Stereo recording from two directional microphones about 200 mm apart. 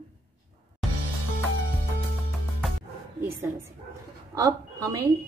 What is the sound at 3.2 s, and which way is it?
A woman's voice, 15° right (ahead or behind).